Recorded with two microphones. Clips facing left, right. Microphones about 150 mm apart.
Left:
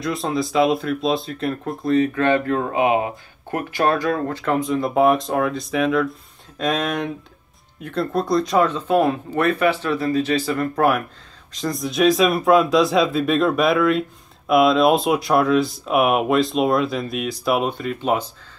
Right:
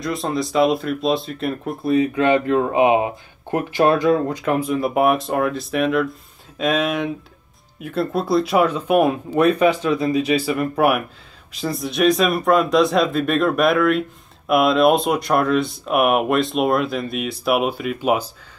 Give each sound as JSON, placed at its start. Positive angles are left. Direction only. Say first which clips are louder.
{"t": 0.0, "sound": "speech", "louder": "even", "side_deg": 0}
{"t": 1.9, "sound": "speech", "louder": "right 1 dB", "side_deg": -15}